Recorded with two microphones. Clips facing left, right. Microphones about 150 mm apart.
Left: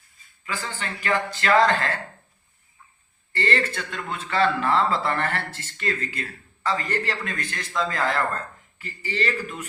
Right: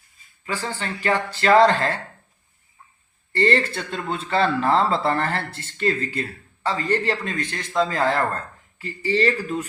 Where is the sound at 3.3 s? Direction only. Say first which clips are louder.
Right 5 dB; 35° right (ahead or behind).